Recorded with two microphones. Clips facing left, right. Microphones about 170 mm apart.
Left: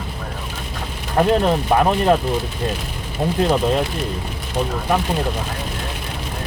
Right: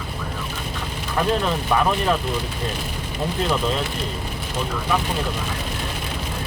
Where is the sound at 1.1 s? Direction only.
40° left (ahead or behind).